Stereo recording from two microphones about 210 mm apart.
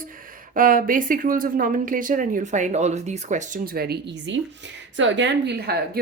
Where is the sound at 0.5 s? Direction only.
40° right (ahead or behind).